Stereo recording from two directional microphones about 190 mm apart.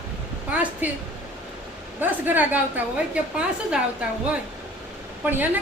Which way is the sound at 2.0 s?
10° right (ahead or behind).